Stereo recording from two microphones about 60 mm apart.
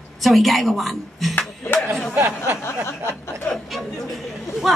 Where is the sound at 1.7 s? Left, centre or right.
Left.